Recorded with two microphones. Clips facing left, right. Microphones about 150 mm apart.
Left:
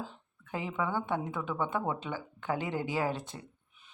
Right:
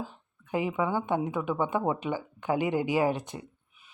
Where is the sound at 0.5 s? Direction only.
15° right (ahead or behind).